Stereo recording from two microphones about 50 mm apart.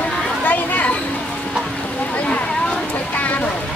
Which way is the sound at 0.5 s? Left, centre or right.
Left.